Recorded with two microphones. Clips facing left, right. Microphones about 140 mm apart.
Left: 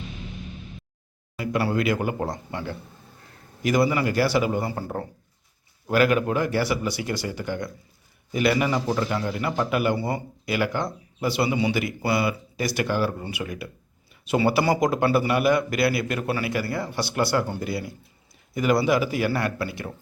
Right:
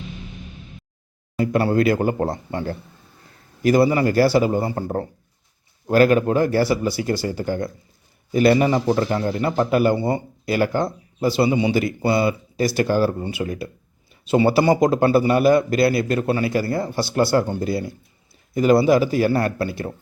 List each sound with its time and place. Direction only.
1.4 s a man's voice: 30° right (ahead or behind)